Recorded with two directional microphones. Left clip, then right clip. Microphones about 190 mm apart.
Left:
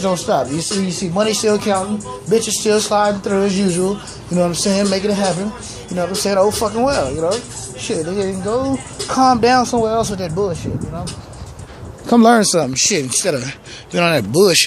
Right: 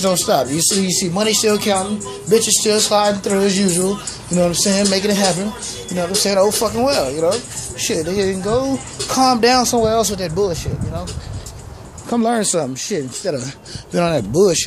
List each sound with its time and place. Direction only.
0.0 s speech: 10° right (ahead or behind)
12.1 s speech: 45° left (ahead or behind)
12.4 s speech: 20° left (ahead or behind)
13.9 s speech: 10° right (ahead or behind)